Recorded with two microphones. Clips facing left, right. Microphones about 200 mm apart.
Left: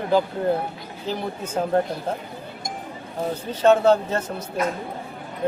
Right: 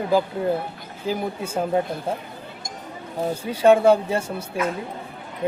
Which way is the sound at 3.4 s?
10° right (ahead or behind).